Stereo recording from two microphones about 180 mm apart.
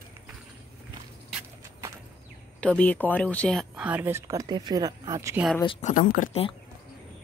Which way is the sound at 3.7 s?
10° right (ahead or behind).